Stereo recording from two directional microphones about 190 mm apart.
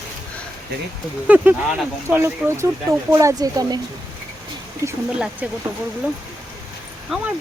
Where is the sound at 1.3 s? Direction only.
10° right (ahead or behind).